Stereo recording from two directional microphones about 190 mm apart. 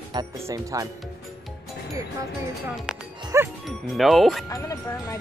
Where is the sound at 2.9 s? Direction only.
5° right (ahead or behind).